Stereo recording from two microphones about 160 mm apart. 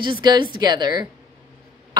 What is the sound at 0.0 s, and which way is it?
A woman's voice, 30° right (ahead or behind).